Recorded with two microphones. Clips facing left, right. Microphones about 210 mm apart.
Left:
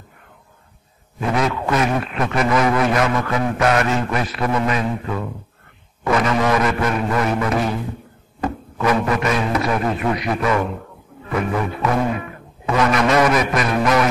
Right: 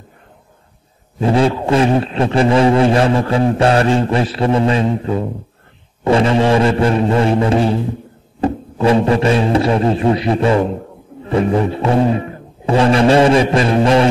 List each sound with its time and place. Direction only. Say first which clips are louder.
1.2 s music: right 6 dB; 30° right (ahead or behind)